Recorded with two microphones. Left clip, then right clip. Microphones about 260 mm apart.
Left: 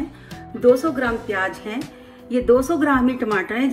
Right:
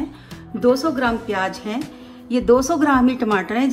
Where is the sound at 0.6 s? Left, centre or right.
Right.